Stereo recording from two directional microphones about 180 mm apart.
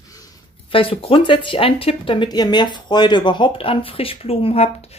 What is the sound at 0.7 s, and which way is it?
Speech, 30° left (ahead or behind).